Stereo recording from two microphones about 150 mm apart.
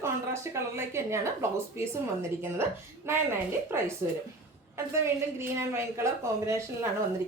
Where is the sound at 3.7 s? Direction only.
15° right (ahead or behind).